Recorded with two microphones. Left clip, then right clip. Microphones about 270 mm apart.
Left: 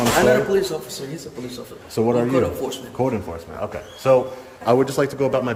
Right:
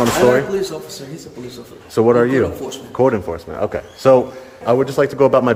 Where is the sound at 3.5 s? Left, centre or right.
Right.